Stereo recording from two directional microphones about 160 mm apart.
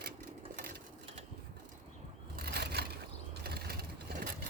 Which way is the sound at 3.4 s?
80° right.